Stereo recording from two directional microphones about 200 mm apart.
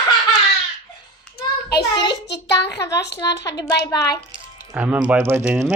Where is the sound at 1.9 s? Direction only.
60° left (ahead or behind).